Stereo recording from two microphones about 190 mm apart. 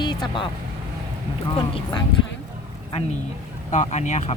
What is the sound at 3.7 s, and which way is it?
Speech, 35° left (ahead or behind).